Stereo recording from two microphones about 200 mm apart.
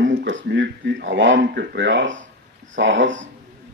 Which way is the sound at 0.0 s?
65° right (ahead or behind).